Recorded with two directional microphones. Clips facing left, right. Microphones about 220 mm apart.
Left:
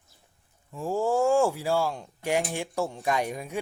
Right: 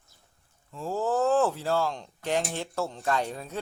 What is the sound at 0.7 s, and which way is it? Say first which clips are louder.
Speech: left 2 dB; 15° left (ahead or behind).